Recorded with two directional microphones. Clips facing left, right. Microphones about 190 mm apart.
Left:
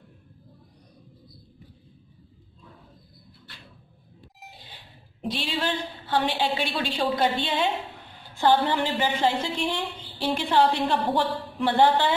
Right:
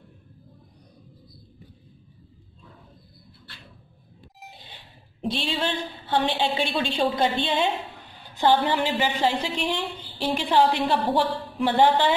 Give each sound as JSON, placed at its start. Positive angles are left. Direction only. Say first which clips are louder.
{"t": 5.3, "sound": "a woman's voice", "louder": "right 1 dB", "side_deg": -25}